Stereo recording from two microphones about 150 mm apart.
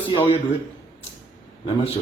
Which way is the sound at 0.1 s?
35° left (ahead or behind).